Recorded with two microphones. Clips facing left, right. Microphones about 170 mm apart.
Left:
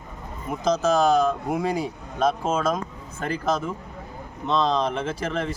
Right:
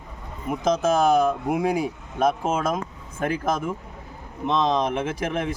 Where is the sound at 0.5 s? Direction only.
10° right (ahead or behind).